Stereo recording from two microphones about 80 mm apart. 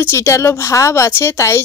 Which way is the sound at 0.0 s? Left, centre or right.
Left.